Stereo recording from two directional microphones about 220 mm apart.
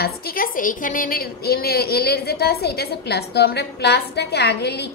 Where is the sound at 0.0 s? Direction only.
45° left (ahead or behind).